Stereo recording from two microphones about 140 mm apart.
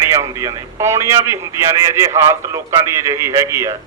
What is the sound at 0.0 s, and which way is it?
A man's voice, 20° right (ahead or behind).